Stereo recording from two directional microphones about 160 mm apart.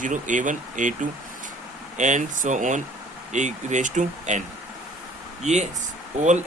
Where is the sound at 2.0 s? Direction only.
50° right (ahead or behind).